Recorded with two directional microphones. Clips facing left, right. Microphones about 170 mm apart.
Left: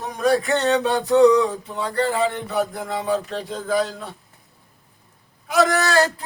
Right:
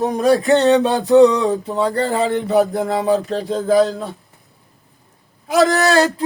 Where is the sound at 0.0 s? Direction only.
35° right (ahead or behind).